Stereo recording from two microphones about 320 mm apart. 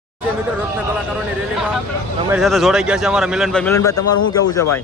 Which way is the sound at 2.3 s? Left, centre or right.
Centre.